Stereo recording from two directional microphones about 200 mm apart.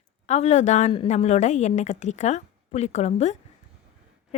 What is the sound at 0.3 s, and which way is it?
A woman's voice, 35° left (ahead or behind).